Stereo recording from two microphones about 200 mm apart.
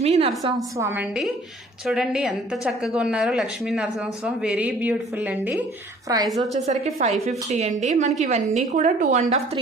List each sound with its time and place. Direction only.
0.0 s a woman's voice: 30° right (ahead or behind)
0.8 s a woman's voice: 10° right (ahead or behind)
6.5 s a woman's voice: 35° right (ahead or behind)